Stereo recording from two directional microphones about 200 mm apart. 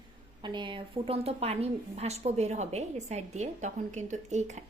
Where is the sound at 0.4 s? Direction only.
25° right (ahead or behind).